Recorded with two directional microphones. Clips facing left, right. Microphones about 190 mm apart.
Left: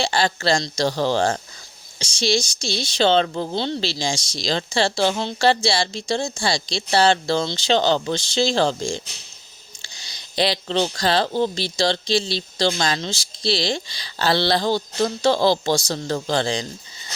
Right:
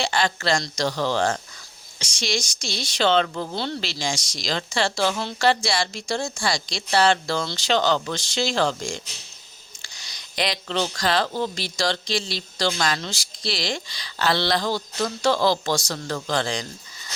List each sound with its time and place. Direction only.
0.0 s speech: 30° left (ahead or behind)